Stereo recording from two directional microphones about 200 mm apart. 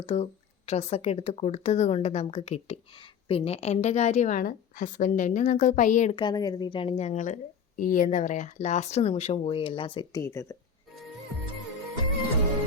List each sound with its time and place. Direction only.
0.0 s a woman's voice: 30° left (ahead or behind)
6.1 s a woman's voice: 20° left (ahead or behind)